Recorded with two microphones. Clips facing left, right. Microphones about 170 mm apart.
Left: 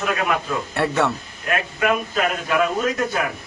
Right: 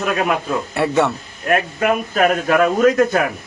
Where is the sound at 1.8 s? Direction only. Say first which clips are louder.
Right 2 dB; 45° right (ahead or behind).